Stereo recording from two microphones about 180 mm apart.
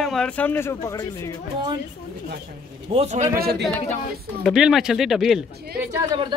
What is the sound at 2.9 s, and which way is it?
Speech, 35° right (ahead or behind).